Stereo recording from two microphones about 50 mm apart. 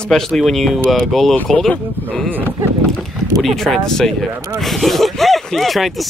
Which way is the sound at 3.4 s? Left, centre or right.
Centre.